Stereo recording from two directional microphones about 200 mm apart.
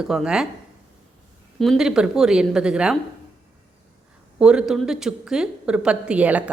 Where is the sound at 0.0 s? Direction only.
5° right (ahead or behind).